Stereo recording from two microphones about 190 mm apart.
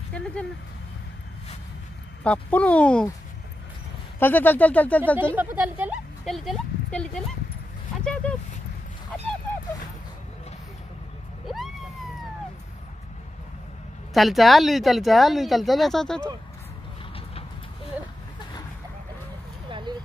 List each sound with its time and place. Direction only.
0.1 s speech: 5° left (ahead or behind)
2.2 s speech: 5° left (ahead or behind)
4.2 s speech: 10° left (ahead or behind)
5.1 s speech: 10° right (ahead or behind); by 9.3 s 5° left (ahead or behind)
11.4 s vehicle: centre (ahead or behind)
14.1 s speech: centre (ahead or behind)
19.7 s a sound: 25° right (ahead or behind)